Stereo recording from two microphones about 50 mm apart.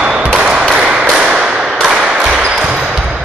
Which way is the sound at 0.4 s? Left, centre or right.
Centre.